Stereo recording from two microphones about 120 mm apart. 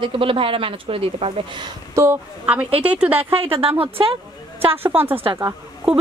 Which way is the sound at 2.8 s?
10° right (ahead or behind).